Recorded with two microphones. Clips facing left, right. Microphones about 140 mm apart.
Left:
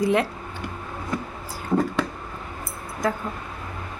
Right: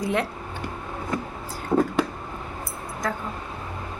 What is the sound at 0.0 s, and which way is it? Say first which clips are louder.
Speech: left 4 dB; centre (ahead or behind).